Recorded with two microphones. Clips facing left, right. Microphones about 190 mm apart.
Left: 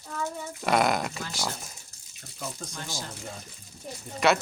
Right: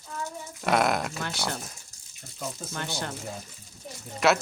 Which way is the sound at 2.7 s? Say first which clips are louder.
Right 4 dB; 65° right (ahead or behind).